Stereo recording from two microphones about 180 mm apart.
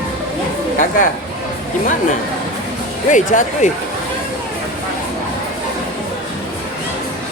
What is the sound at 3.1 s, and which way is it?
Speech, 45° left (ahead or behind).